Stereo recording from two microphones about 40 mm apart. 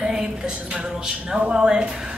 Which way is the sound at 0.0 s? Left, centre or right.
Centre.